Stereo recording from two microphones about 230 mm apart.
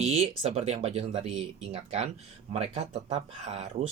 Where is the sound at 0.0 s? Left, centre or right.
Right.